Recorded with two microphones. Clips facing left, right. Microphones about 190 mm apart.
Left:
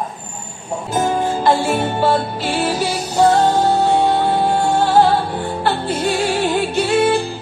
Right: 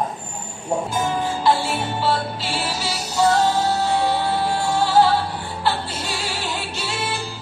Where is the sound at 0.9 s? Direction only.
45° left (ahead or behind).